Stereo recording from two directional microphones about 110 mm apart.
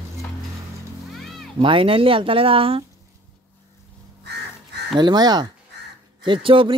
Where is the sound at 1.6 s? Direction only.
55° right (ahead or behind).